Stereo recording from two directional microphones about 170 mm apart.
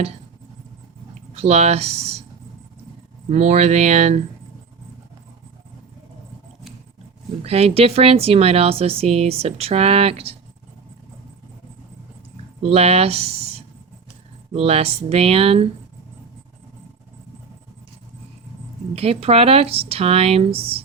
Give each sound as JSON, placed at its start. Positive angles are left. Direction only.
{"t": 1.3, "sound": "speech", "side_deg": -40}
{"t": 3.2, "sound": "speech", "side_deg": -40}
{"t": 7.4, "sound": "speech", "side_deg": -35}
{"t": 12.6, "sound": "speech", "side_deg": -35}
{"t": 14.5, "sound": "speech", "side_deg": -35}
{"t": 18.9, "sound": "speech", "side_deg": -35}